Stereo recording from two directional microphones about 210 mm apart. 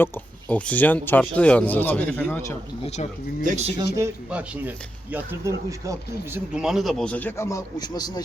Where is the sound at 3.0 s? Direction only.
35° left (ahead or behind).